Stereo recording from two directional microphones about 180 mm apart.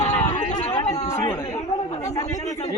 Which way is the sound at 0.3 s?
40° left (ahead or behind).